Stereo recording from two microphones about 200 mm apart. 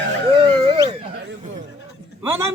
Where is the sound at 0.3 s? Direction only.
25° right (ahead or behind).